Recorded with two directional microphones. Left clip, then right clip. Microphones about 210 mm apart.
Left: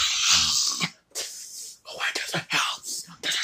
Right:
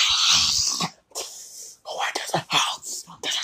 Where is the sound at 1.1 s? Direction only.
Centre (ahead or behind).